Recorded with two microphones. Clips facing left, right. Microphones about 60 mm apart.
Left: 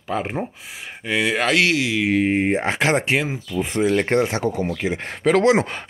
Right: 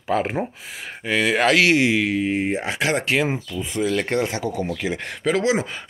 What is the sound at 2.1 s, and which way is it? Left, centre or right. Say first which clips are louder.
Speech: left 3 dB; left.